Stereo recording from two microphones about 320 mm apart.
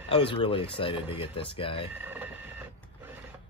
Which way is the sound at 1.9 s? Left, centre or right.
Centre.